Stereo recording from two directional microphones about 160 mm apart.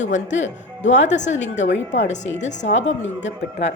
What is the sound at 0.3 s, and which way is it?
A woman's voice, 45° left (ahead or behind).